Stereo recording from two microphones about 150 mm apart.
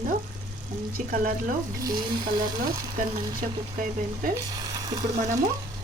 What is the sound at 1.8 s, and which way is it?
Frying, 25° right (ahead or behind).